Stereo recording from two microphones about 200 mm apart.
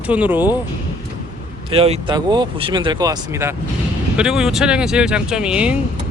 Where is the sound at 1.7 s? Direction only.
30° right (ahead or behind).